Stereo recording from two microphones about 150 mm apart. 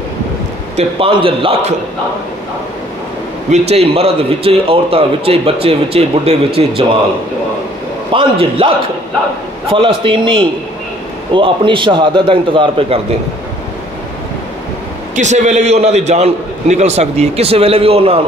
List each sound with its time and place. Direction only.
0.7 s a man's voice: 35° right (ahead or behind)
3.4 s a man's voice: 45° right (ahead or behind)
8.1 s a man's voice: 35° right (ahead or behind)
11.3 s a man's voice: 35° right (ahead or behind)
15.1 s a man's voice: 55° right (ahead or behind)